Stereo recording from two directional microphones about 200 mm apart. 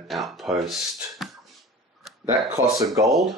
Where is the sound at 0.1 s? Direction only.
Centre (ahead or behind).